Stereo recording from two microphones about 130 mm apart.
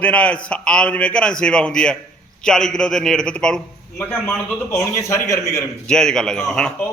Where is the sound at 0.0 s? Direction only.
10° left (ahead or behind).